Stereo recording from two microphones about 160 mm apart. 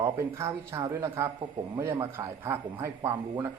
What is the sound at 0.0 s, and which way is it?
A man's voice, 15° right (ahead or behind).